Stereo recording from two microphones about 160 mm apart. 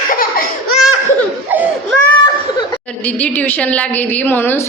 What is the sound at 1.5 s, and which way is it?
Baby cry, 10° right (ahead or behind).